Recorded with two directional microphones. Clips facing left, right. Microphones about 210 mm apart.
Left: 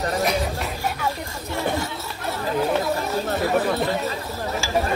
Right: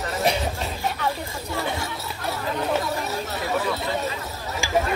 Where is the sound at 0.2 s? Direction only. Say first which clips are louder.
Left 1 dB; 30° right (ahead or behind).